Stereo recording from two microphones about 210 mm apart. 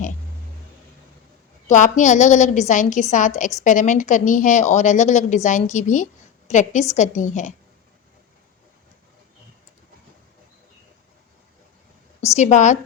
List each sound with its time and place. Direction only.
1.6 s a woman's voice: 35° left (ahead or behind)
12.4 s a woman's voice: 35° left (ahead or behind)